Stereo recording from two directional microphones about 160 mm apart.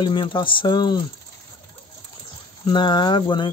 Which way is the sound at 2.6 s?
30° left (ahead or behind).